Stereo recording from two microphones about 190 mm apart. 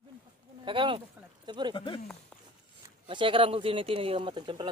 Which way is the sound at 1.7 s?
25° left (ahead or behind).